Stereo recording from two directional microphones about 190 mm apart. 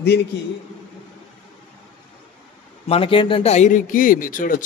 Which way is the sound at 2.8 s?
30° left (ahead or behind).